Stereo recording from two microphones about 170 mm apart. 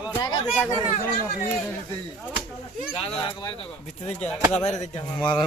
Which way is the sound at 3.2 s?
30° left (ahead or behind).